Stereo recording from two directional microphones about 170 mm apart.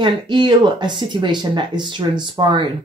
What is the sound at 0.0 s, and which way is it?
Speech, 25° right (ahead or behind).